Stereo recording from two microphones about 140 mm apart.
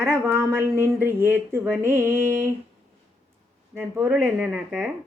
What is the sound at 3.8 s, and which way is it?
A woman's voice, 10° right (ahead or behind).